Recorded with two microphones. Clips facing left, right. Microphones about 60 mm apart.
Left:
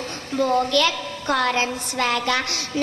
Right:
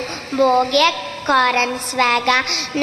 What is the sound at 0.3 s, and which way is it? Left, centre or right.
A woman's voice, right.